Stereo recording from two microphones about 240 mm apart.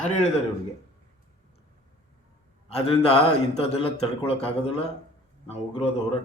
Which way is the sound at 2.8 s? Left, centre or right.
Left.